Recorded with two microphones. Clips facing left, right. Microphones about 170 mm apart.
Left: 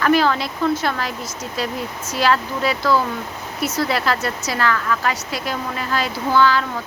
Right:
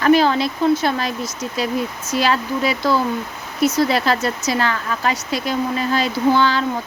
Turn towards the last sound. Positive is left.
turn(degrees=-25)  # may be behind; listen again after turning